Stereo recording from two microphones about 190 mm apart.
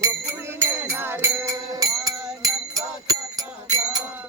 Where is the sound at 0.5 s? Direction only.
10° right (ahead or behind).